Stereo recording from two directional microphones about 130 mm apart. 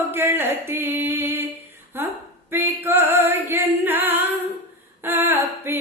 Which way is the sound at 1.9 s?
15° right (ahead or behind).